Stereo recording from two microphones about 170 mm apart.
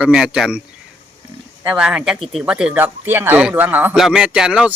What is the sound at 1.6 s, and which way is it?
Speech, 10° right (ahead or behind).